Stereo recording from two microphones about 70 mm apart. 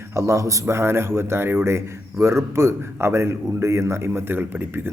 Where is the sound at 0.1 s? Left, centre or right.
Right.